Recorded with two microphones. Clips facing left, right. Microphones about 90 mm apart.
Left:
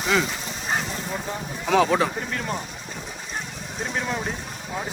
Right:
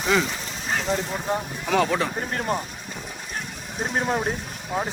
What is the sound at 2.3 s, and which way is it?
Vehicle, 40° right (ahead or behind).